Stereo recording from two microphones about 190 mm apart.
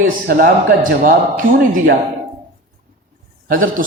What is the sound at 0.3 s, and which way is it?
A man's voice, 50° right (ahead or behind).